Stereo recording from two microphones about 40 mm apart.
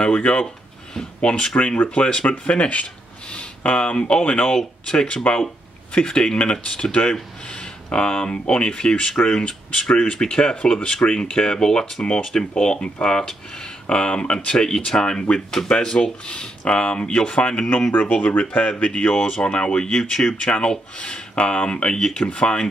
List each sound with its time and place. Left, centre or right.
0.1 s speech: left
17.9 s speech: left
19.0 s speech: left